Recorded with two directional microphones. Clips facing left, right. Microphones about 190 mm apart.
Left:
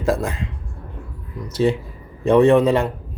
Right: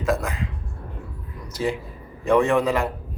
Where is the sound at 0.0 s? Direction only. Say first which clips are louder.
Left 3 dB; 30° left (ahead or behind).